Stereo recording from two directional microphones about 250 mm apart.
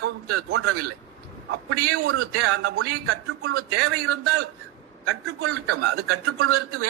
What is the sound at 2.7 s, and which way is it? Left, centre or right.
A man's voice, right.